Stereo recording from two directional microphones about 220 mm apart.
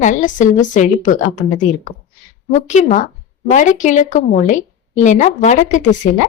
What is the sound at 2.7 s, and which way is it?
Speech, 35° left (ahead or behind).